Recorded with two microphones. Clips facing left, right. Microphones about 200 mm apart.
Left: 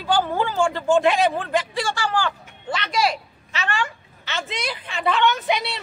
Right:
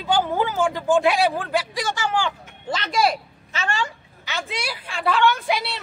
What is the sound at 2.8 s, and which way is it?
Speech, 50° right (ahead or behind).